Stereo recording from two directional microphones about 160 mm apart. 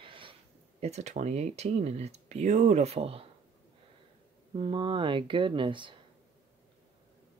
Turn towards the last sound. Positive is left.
turn(degrees=-30)  # may be behind; listen again after turning